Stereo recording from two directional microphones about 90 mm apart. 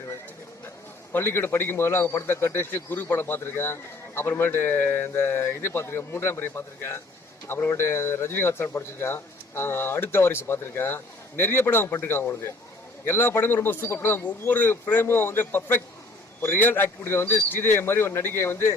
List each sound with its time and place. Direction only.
1.1 s a man's voice: 25° left (ahead or behind)